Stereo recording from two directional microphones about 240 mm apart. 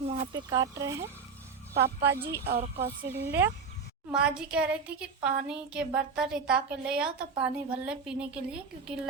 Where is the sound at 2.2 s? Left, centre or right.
Right.